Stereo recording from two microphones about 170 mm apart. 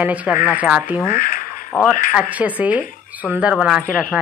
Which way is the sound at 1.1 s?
55° left (ahead or behind).